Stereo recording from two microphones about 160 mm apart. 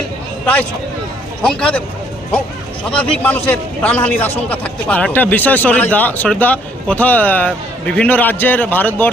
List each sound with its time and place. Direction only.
1.4 s a man's voice: 5° left (ahead or behind)
3.0 s a man's voice: 10° left (ahead or behind)